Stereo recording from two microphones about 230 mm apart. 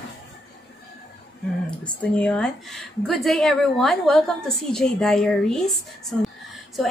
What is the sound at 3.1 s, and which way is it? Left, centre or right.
A woman's voice, centre.